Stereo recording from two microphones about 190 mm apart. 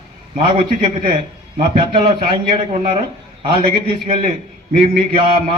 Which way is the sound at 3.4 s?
25° right (ahead or behind).